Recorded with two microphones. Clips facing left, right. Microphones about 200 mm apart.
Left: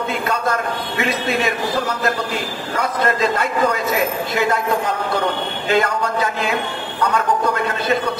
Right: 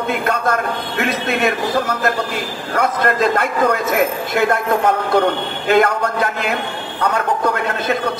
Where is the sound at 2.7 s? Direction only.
55° right (ahead or behind).